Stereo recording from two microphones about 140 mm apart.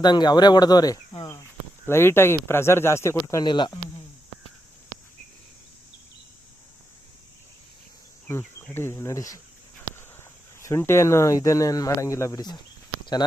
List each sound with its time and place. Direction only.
0.0 s speech: 30° left (ahead or behind)
3.4 s speech: 30° left (ahead or behind)
8.3 s speech: 20° left (ahead or behind)
10.6 s speech: 20° left (ahead or behind)